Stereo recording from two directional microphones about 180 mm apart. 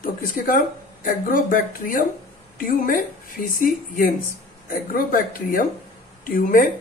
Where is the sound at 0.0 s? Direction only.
50° left (ahead or behind).